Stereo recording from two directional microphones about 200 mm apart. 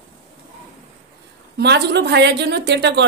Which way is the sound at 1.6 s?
55° right (ahead or behind).